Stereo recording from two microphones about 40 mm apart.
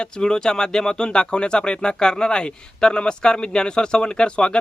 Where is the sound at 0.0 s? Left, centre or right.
Centre.